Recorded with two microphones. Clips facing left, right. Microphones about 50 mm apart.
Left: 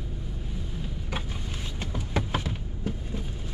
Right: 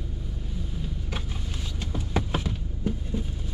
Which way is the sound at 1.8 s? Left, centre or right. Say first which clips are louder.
Right 1 dB; centre.